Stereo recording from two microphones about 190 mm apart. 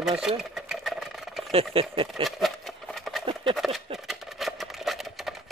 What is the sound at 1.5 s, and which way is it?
Speech, 30° right (ahead or behind).